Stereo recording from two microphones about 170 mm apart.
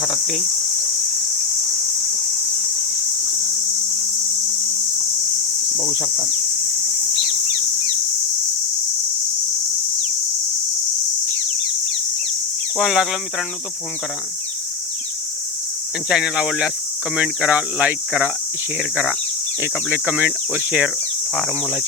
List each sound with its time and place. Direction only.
0.0 s speech: 5° left (ahead or behind)
5.5 s cricket: 30° left (ahead or behind)
6.3 s a sound: 45° left (ahead or behind)
12.7 s speech: 5° right (ahead or behind)
16.0 s speech: 5° right (ahead or behind)